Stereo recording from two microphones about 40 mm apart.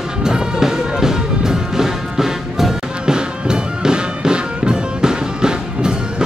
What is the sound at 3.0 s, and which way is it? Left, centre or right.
Music, centre.